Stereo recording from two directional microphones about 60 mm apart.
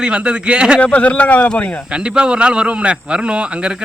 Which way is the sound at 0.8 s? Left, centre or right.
Left.